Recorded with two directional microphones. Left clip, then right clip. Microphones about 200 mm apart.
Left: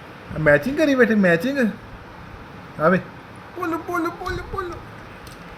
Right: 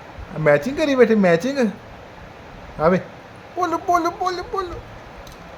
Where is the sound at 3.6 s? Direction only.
35° right (ahead or behind).